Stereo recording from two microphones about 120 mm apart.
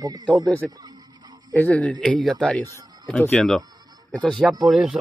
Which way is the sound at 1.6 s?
10° left (ahead or behind).